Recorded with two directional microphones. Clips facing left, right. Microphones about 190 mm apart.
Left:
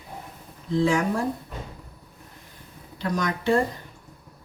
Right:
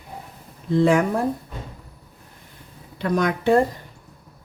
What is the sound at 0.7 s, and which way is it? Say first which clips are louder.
Speech: right 5 dB; 55° right (ahead or behind).